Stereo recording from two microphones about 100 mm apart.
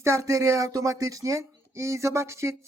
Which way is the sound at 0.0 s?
30° right (ahead or behind).